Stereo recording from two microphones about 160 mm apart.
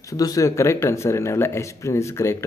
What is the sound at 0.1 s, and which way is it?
Speech, 20° left (ahead or behind).